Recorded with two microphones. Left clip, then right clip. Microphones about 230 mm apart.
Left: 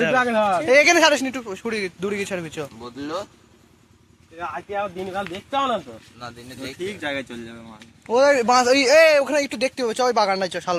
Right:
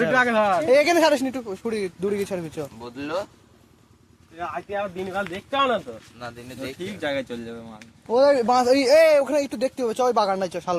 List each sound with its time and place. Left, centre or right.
0.1 s speech: centre
0.6 s a man's voice: centre
4.7 s speech: centre
6.5 s speech: right
6.7 s speech: right
8.0 s a man's voice: centre